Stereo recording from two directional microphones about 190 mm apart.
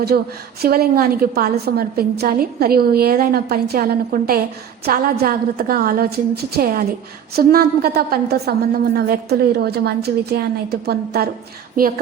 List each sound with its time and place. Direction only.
0.1 s a woman's voice: 50° right (ahead or behind)